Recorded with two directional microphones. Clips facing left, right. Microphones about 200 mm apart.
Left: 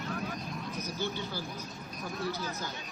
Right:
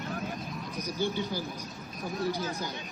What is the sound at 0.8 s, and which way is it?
Speech, 15° right (ahead or behind).